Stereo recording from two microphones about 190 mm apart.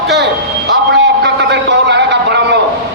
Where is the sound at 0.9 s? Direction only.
70° right (ahead or behind).